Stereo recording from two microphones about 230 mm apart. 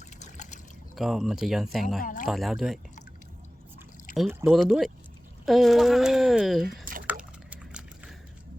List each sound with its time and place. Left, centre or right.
0.2 s trickle: left
0.9 s speech: centre
2.0 s speech: left
2.2 s speech: centre
4.1 s speech: centre
7.0 s liquid: centre